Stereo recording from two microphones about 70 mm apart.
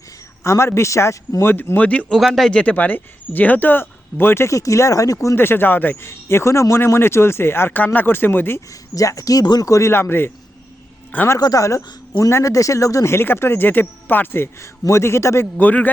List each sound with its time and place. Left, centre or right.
0.4 s speech: left
1.5 s speech: left
2.1 s speech: centre
2.7 s speech: left
4.4 s speech: left
5.4 s speech: left
6.1 s speech: left
8.7 s speech: left
9.9 s speech: left
11.3 s speech: left
12.1 s speech: left
13.1 s speech: left
15.5 s speech: left